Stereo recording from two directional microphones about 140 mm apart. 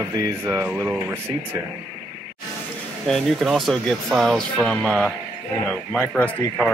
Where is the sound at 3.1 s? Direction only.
5° left (ahead or behind).